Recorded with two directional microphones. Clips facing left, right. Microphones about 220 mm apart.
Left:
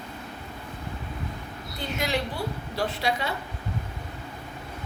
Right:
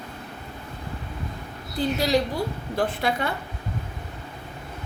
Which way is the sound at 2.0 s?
35° right (ahead or behind).